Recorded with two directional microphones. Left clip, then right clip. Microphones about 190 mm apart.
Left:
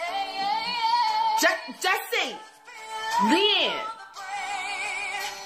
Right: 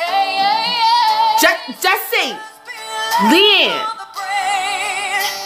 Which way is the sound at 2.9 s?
35° right (ahead or behind).